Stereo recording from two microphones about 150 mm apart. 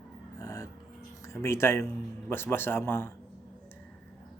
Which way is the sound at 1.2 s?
15° left (ahead or behind).